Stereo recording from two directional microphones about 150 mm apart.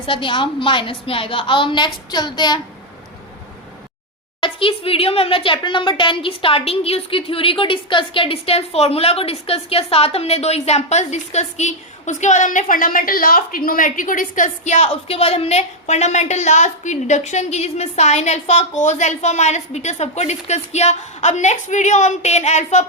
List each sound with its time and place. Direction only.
0.0 s a woman's voice: 35° left (ahead or behind)
4.4 s a woman's voice: 35° left (ahead or behind)